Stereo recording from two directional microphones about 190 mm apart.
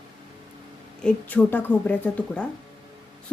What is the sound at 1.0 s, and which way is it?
Speech, 5° left (ahead or behind).